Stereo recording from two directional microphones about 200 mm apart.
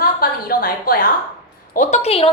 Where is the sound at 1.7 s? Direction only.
35° left (ahead or behind).